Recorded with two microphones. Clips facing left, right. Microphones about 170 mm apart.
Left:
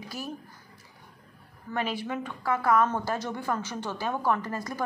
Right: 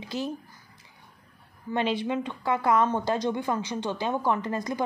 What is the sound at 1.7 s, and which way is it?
A woman's voice, 25° right (ahead or behind).